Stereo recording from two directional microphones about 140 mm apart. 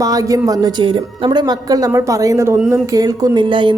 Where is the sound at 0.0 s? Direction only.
25° right (ahead or behind).